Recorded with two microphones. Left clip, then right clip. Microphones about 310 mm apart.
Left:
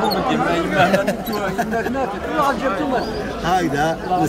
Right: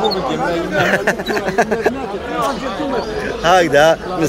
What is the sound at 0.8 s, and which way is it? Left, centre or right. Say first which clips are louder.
Speech: right 4 dB; centre.